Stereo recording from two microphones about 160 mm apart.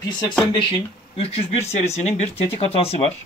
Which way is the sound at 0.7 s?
35° left (ahead or behind).